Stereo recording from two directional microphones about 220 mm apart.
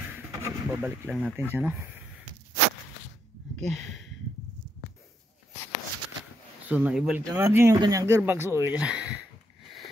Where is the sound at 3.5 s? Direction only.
Centre (ahead or behind).